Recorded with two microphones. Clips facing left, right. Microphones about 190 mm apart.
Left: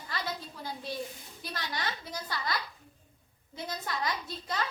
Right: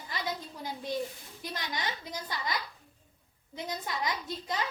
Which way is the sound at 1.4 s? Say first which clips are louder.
Right 1 dB; 15° right (ahead or behind).